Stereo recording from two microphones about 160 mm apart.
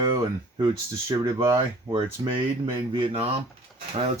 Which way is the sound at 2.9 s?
35° right (ahead or behind).